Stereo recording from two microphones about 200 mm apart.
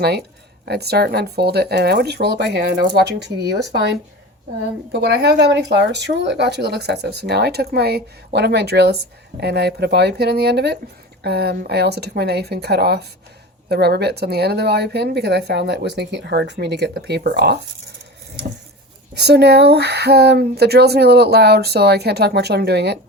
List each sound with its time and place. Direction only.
0.0 s speech: 55° right (ahead or behind)
4.9 s speech: 55° right (ahead or behind)
19.1 s speech: 55° right (ahead or behind)